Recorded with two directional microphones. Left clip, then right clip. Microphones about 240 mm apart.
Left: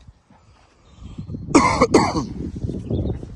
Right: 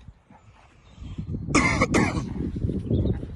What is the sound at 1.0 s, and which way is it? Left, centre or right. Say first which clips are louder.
Throat clearing: left 1 dB; centre.